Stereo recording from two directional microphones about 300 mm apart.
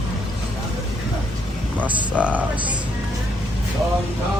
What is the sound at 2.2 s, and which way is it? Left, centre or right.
Speech, centre.